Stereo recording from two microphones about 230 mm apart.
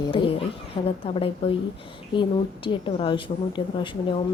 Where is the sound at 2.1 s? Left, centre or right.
Left.